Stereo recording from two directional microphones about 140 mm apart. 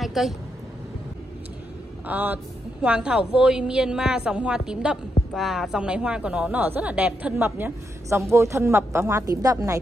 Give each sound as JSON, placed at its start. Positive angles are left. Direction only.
{"t": 0.0, "sound": "vehicle", "side_deg": 0}
{"t": 2.0, "sound": "speech", "side_deg": -10}